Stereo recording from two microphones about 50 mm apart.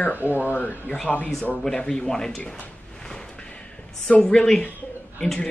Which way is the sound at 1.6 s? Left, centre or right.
Centre.